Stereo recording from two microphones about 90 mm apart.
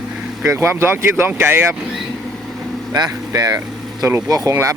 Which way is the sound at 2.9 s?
45° right (ahead or behind).